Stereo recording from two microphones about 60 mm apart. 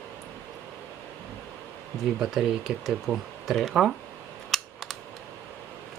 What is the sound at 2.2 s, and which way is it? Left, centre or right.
Speech, centre.